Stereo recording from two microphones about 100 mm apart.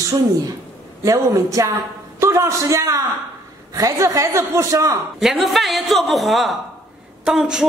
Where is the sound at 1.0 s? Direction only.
35° right (ahead or behind).